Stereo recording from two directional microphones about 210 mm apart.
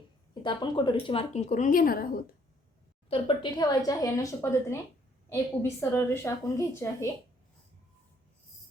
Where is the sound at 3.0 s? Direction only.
25° left (ahead or behind).